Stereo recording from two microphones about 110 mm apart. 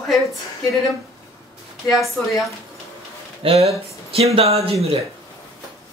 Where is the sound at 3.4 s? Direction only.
65° right (ahead or behind).